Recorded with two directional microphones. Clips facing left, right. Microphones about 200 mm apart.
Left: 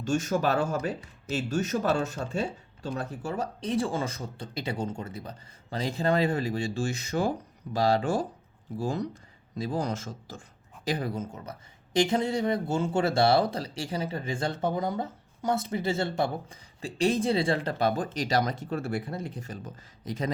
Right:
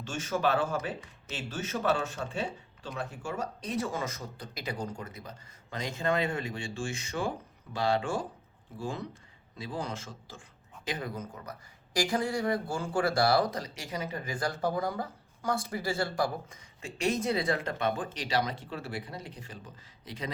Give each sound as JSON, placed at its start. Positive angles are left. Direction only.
{"t": 0.0, "sound": "speech", "side_deg": 45}